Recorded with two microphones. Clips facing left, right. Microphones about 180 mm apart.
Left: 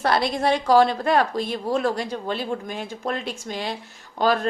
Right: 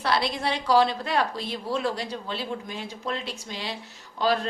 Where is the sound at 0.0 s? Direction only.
50° left (ahead or behind).